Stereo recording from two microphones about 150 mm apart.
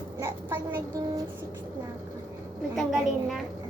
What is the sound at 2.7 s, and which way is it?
Speech, centre (ahead or behind).